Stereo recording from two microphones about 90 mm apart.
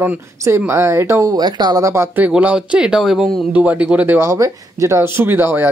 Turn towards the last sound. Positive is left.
turn(degrees=-25)  # may be behind; listen again after turning